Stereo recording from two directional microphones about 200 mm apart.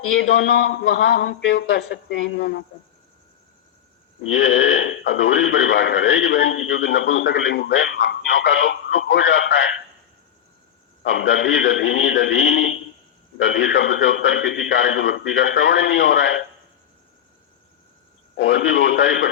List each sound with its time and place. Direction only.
0.2 s a man's voice: 70° left (ahead or behind)
4.3 s speech: 75° left (ahead or behind)
11.0 s speech: 65° left (ahead or behind)
18.3 s speech: 70° left (ahead or behind)